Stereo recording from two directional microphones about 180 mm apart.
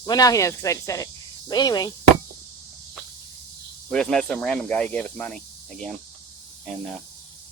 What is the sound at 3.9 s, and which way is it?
Speech, centre (ahead or behind).